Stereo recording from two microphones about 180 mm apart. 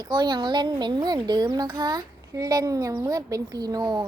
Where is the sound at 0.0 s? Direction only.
25° right (ahead or behind).